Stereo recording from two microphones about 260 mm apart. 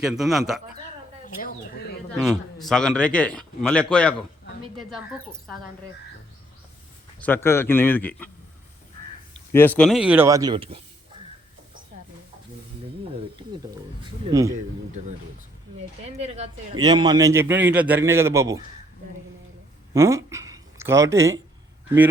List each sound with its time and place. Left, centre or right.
0.0 s a man's voice: centre
1.2 s speech: left
2.2 s a man's voice: centre
7.2 s speech: centre
9.5 s a man's voice: centre
14.3 s a man's voice: centre
16.1 s a man's voice: right
19.9 s speech: centre